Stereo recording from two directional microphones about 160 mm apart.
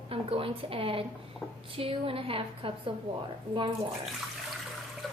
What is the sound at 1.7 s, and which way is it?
A woman's voice, 35° right (ahead or behind).